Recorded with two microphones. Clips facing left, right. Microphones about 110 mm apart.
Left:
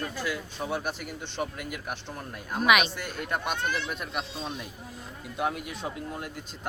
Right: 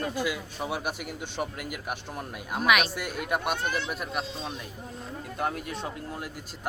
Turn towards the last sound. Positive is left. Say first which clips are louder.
# left 1 dB
turn(degrees=0)  # may be behind; listen again after turning